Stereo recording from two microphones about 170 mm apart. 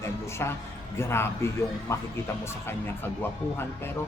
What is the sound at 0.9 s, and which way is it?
A man's voice, 15° left (ahead or behind).